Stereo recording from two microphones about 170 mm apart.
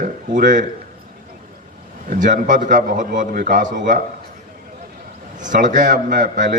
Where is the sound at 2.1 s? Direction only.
50° right (ahead or behind).